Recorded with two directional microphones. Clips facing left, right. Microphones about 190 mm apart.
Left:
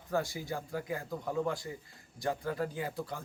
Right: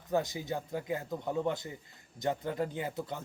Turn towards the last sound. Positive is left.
turn(degrees=-20)  # may be behind; listen again after turning